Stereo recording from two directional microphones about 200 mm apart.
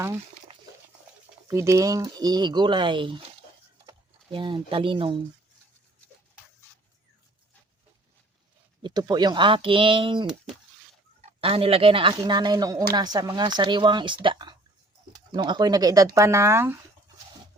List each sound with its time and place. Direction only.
1.5 s speech: 15° right (ahead or behind)
8.8 s speech: 20° right (ahead or behind)
11.3 s speech: 30° right (ahead or behind); by 16.7 s 15° right (ahead or behind)